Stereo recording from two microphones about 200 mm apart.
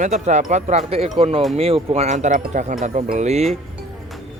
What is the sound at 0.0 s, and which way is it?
Speech, 35° right (ahead or behind).